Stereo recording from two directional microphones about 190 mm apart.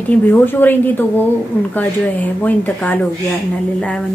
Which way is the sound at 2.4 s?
10° left (ahead or behind).